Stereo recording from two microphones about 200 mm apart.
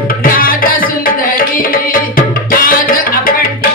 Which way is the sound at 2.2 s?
45° left (ahead or behind).